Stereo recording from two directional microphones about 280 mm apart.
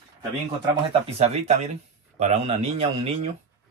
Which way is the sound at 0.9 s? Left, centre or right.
Right.